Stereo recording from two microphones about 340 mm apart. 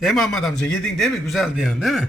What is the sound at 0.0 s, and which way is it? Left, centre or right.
Speech, centre.